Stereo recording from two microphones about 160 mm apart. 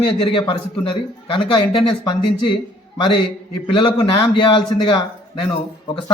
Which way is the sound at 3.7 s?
30° left (ahead or behind).